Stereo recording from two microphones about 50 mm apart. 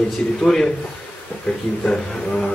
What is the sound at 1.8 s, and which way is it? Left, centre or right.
Speech, centre.